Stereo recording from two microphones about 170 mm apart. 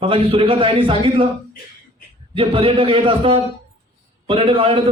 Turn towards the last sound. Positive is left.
turn(degrees=-30)  # may be behind; listen again after turning